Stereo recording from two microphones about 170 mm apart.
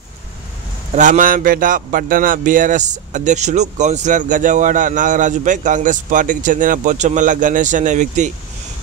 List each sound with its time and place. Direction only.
0.9 s a man's voice: 50° right (ahead or behind)